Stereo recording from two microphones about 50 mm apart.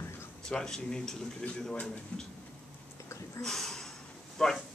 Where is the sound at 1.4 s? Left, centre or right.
Left.